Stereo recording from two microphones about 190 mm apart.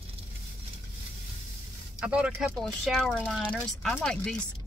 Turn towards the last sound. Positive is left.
turn(degrees=5)  # may be behind; listen again after turning